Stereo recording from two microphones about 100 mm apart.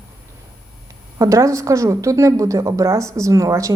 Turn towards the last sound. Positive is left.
turn(degrees=-35)  # may be behind; listen again after turning